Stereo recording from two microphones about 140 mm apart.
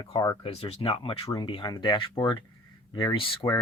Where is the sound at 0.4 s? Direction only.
45° left (ahead or behind).